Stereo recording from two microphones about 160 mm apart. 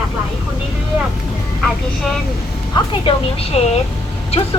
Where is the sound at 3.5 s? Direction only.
40° left (ahead or behind).